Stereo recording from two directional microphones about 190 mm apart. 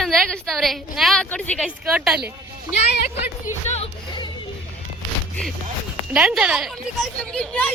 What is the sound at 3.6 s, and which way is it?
Music, 35° left (ahead or behind).